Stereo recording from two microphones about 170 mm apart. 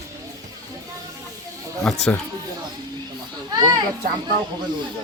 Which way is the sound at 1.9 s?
5° left (ahead or behind).